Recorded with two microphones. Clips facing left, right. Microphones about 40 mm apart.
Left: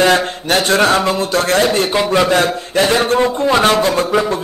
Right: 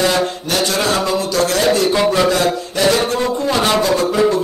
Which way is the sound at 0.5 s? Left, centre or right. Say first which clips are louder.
Left 7 dB; left.